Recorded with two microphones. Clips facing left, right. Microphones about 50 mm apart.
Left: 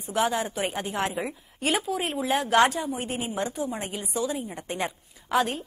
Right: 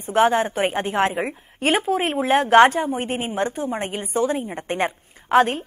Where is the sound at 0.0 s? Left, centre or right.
Right.